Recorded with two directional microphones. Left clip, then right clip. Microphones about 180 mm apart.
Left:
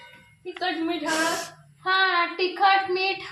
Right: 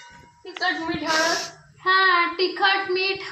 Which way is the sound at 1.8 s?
35° left (ahead or behind).